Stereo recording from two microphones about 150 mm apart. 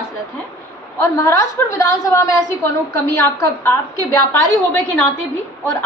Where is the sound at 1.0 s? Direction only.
20° left (ahead or behind).